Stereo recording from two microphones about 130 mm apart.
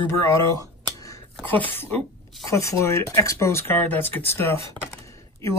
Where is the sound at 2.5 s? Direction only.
20° left (ahead or behind).